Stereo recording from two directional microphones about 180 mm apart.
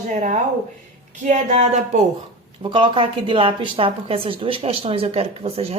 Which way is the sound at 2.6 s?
25° right (ahead or behind).